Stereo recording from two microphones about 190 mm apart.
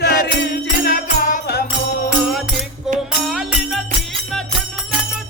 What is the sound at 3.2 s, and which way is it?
Music, centre (ahead or behind).